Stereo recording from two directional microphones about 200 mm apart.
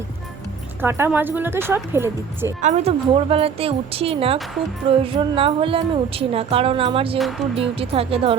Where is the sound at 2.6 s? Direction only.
35° right (ahead or behind).